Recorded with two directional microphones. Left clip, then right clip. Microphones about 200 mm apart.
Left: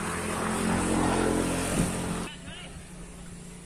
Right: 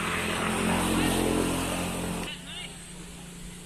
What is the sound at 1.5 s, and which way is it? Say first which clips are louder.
Vehicle: even; 15° left (ahead or behind).